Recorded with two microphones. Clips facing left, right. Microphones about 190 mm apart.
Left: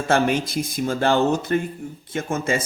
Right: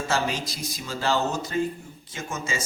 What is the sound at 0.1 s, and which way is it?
A man's voice, 55° left (ahead or behind).